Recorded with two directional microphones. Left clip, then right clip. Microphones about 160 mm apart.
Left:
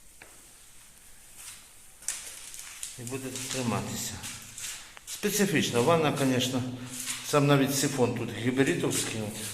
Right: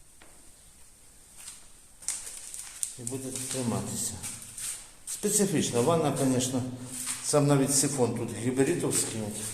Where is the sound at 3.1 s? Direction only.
20° right (ahead or behind).